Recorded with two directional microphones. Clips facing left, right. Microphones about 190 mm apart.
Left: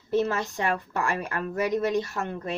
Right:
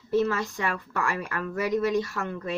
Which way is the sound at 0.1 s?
25° left (ahead or behind).